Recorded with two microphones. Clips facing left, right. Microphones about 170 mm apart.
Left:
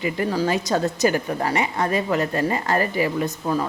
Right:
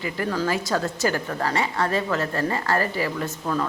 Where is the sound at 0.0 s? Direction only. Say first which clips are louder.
Left 3 dB; 20° left (ahead or behind).